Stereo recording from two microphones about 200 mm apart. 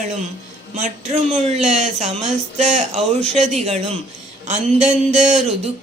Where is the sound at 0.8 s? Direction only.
35° right (ahead or behind).